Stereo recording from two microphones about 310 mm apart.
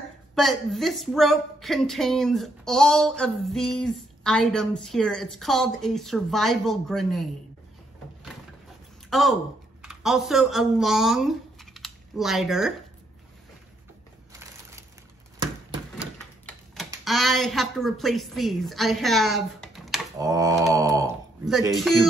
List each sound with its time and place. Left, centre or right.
0.3 s a woman's voice: centre
9.1 s speech: centre
15.3 s a sound: centre
17.0 s a woman's voice: centre
20.2 s mantra: centre
21.7 s a woman's voice: centre